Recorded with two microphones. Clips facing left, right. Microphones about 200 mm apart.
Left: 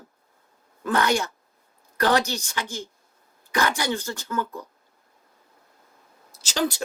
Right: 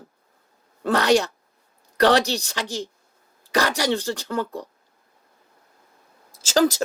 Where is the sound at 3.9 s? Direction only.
35° right (ahead or behind).